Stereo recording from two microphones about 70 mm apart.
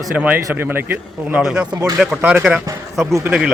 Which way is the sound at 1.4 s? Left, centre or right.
Centre.